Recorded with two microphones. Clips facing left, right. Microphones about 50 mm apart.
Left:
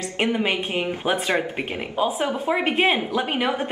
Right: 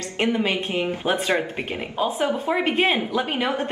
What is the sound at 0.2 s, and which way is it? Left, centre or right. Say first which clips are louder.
Speech: even; centre.